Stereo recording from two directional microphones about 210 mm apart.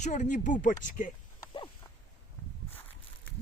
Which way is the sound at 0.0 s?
35° left (ahead or behind).